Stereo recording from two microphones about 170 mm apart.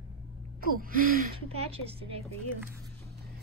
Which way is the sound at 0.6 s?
55° right (ahead or behind).